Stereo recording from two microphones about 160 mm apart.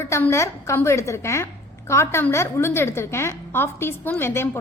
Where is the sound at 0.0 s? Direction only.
15° left (ahead or behind).